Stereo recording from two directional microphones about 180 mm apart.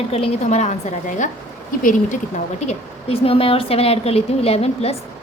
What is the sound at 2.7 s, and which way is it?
Speech, 30° left (ahead or behind).